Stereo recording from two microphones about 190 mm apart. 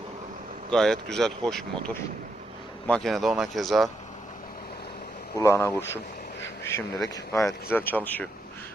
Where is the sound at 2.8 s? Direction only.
5° left (ahead or behind).